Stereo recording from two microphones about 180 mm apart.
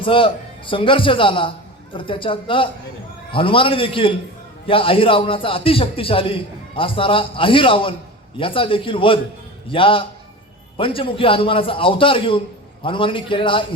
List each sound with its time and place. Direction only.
0.0 s a man's voice: 30° left (ahead or behind)